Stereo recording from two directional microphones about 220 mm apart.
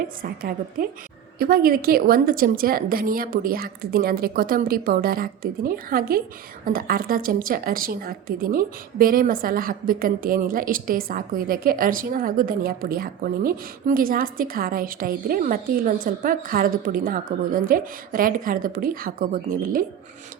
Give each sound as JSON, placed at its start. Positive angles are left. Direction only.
{"t": 0.2, "sound": "a woman's voice", "side_deg": -40}